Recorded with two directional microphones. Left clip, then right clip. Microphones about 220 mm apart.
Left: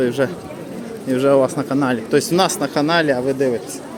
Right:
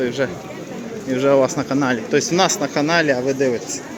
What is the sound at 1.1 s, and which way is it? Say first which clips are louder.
A man's voice: left 1 dB; 10° left (ahead or behind).